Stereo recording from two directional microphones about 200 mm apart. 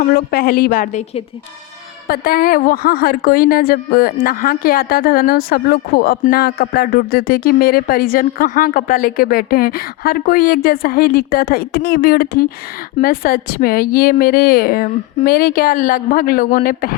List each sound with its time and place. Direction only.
0.1 s a woman's voice: 50° left (ahead or behind)